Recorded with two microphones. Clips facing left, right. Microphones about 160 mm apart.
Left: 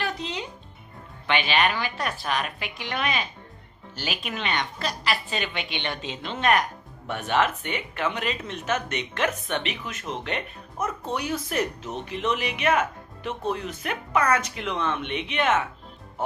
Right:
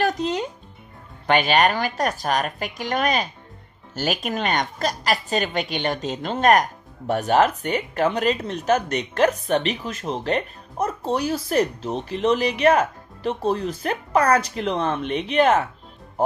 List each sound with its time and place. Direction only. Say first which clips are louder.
0.0 s music: right 8 dB; 45° right (ahead or behind)
1.3 s a woman's voice: right 5 dB; 45° right (ahead or behind)